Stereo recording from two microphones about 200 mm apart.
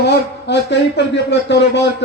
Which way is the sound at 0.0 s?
60° left (ahead or behind).